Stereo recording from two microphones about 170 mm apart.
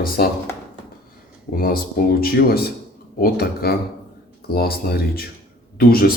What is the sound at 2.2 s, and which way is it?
Speech, 65° left (ahead or behind).